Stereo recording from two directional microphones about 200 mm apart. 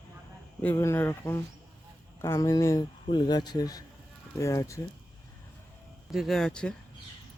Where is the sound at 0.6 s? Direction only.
10° left (ahead or behind).